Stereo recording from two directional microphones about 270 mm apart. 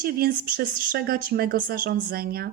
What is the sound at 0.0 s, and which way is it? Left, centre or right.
Speech, right.